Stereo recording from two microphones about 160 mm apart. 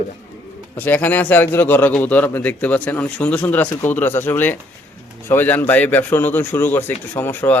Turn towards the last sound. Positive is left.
turn(degrees=15)  # may be behind; listen again after turning